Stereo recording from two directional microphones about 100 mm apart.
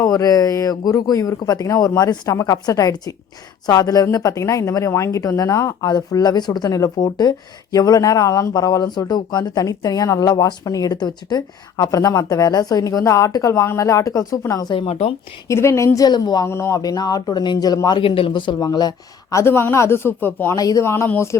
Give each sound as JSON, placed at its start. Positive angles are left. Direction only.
{"t": 0.0, "sound": "speech", "side_deg": 35}
{"t": 14.8, "sound": "speech", "side_deg": 85}
{"t": 15.4, "sound": "speech", "side_deg": 30}
{"t": 16.0, "sound": "speech", "side_deg": 45}
{"t": 16.5, "sound": "speech", "side_deg": 30}
{"t": 18.0, "sound": "speech", "side_deg": 65}
{"t": 19.4, "sound": "speech", "side_deg": 25}
{"t": 20.6, "sound": "speech", "side_deg": 40}
{"t": 20.8, "sound": "speech", "side_deg": 25}